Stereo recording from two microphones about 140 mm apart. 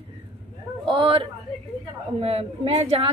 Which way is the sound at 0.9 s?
40° right (ahead or behind).